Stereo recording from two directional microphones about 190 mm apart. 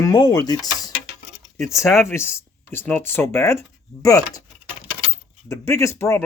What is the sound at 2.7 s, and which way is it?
Speech, 10° left (ahead or behind).